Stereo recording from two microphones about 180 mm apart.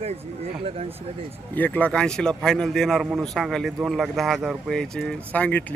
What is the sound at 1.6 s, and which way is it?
Speech, 10° left (ahead or behind).